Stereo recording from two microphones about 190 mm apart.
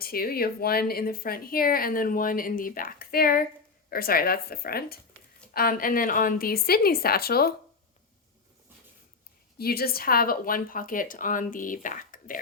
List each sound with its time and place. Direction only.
0.0 s speech: 50° left (ahead or behind)
9.6 s speech: 55° left (ahead or behind)